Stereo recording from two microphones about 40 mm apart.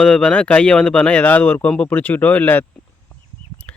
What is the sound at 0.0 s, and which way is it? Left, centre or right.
Speech, left.